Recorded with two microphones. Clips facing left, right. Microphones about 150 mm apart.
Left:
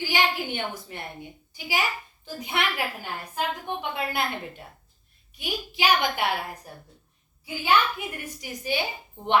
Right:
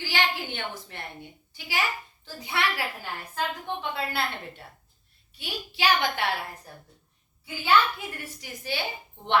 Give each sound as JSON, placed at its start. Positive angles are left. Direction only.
{"t": 0.0, "sound": "a woman's voice", "side_deg": 15}